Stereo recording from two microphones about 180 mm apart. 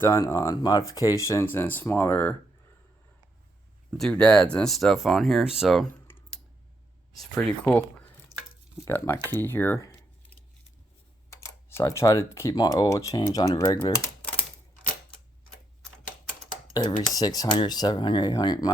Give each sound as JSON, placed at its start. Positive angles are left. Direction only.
{"t": 0.0, "sound": "speech", "side_deg": 15}
{"t": 3.9, "sound": "speech", "side_deg": 5}
{"t": 7.6, "sound": "speech", "side_deg": 5}
{"t": 9.3, "sound": "a sound", "side_deg": 10}
{"t": 11.3, "sound": "speech", "side_deg": 15}
{"t": 16.7, "sound": "speech", "side_deg": 20}